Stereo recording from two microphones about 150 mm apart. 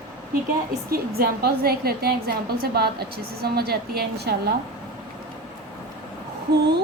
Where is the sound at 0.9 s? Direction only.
90° right.